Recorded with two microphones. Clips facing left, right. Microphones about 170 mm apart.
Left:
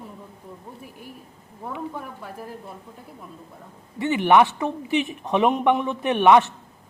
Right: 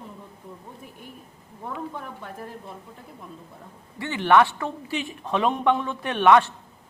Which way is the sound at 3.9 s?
20° left (ahead or behind).